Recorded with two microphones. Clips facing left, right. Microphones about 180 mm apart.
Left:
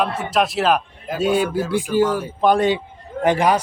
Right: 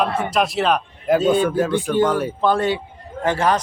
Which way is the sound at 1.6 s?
65° right (ahead or behind).